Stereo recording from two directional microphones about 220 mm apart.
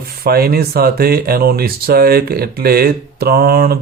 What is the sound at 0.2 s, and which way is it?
Speech, 45° right (ahead or behind).